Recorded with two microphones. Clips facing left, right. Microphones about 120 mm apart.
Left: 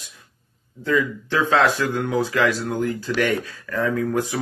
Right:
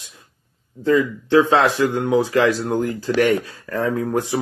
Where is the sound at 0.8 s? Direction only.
30° right (ahead or behind).